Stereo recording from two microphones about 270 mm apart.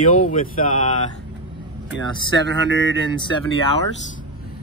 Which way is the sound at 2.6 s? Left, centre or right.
Right.